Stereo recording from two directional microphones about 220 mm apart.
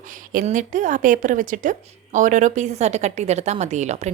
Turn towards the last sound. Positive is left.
turn(degrees=-30)  # may be behind; listen again after turning